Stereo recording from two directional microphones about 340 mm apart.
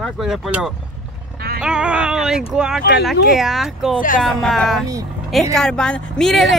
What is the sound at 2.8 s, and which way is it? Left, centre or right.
Speech, left.